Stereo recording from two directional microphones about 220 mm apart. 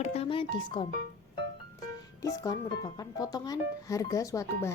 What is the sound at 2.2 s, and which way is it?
Speech, 15° left (ahead or behind).